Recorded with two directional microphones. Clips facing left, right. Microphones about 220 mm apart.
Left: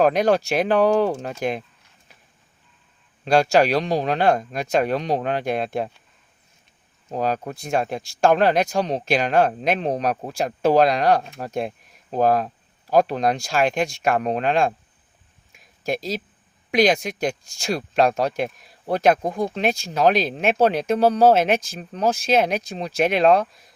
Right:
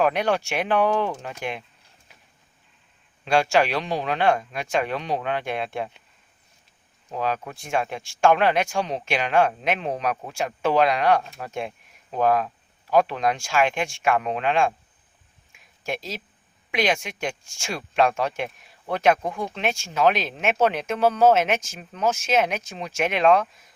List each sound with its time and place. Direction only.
0.0 s speech: 40° left (ahead or behind)
3.2 s speech: 40° left (ahead or behind)
7.1 s speech: 40° left (ahead or behind)
15.5 s a sound: 40° left (ahead or behind)
16.7 s speech: 35° left (ahead or behind)